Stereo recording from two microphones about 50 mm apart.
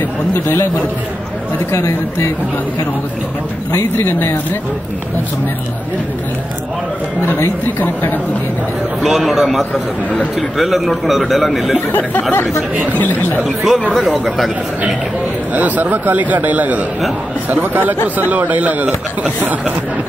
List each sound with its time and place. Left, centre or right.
0.3 s speech: left
1.7 s speech: left
7.6 s a woman's voice: left
9.0 s a man's voice: centre
11.9 s a woman's voice: left
13.6 s a man's voice: centre
15.5 s a man's voice: right